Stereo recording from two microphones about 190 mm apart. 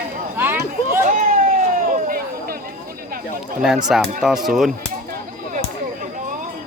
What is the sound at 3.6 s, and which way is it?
Speech, centre (ahead or behind).